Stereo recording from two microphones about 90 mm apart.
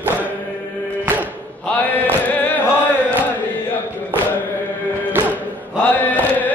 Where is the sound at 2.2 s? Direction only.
20° left (ahead or behind).